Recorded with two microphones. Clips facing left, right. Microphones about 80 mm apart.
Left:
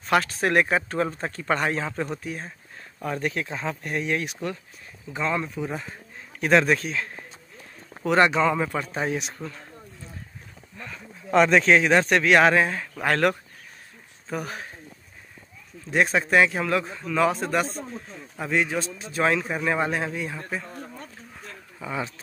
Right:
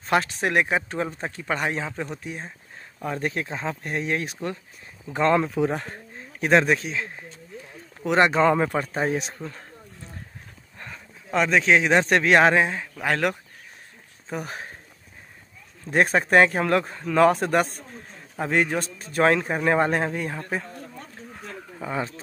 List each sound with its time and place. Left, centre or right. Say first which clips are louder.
0.0 s speech: even; right; by 2.1 s centre
2.2 s speech: left 1 dB; right
5.1 s speech: right 6 dB; right
6.1 s speech: right 1 dB; right
11.3 s speech: left 3 dB; centre
11.7 s speech: even; centre
14.3 s speech: left 1 dB; right
15.9 s a man's voice: right 2 dB; right
21.9 s speech: right 2 dB; right